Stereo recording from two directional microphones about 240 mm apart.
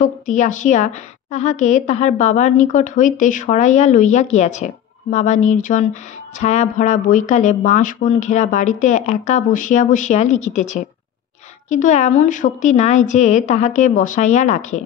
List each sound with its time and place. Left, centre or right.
0.0 s a woman's voice: left